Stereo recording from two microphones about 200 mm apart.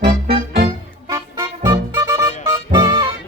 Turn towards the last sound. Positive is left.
turn(degrees=-20)  # may be behind; listen again after turning